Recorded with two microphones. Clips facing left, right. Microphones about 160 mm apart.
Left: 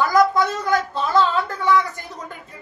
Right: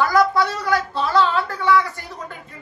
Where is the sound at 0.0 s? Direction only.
20° left (ahead or behind).